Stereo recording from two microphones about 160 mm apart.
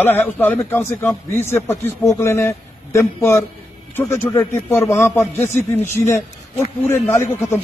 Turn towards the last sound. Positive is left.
turn(degrees=15)  # may be behind; listen again after turning